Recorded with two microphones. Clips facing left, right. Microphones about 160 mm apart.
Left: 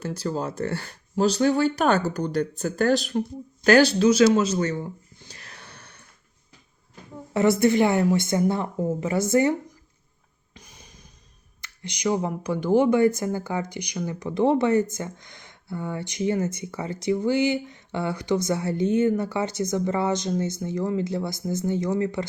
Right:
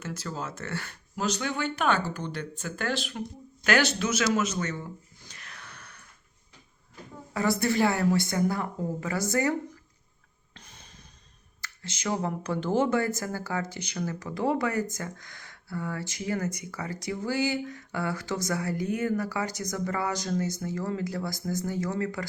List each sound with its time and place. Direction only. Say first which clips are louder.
0.0 s speech: left 7 dB; 35° left (ahead or behind)
5.3 s wheeze: left 2 dB; 30° left (ahead or behind)
7.3 s speech: left 7 dB; 20° left (ahead or behind)
10.5 s a sound: left 3 dB; 10° left (ahead or behind)
11.6 s speech: left 7 dB; 15° left (ahead or behind)